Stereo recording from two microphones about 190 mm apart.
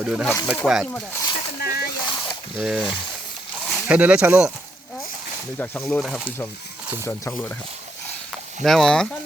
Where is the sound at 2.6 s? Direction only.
5° right (ahead or behind).